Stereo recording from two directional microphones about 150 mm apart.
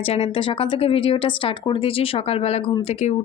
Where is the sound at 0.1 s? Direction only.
40° left (ahead or behind).